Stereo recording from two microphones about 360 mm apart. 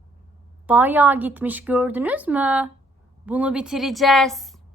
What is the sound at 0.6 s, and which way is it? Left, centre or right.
A woman's voice, centre.